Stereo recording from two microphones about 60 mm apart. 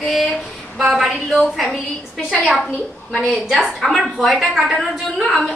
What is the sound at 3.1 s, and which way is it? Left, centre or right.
A woman's voice, centre.